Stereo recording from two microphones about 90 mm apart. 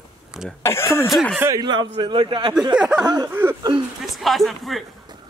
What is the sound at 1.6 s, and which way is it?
Speech, 55° right (ahead or behind).